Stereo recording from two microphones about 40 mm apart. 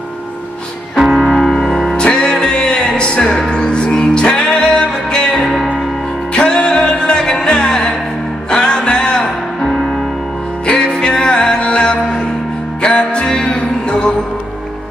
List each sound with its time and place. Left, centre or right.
0.9 s music: centre
1.4 s music: centre
2.0 s music: left